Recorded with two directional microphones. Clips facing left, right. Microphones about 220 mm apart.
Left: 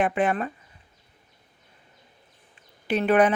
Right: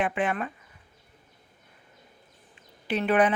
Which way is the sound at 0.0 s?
40° left (ahead or behind).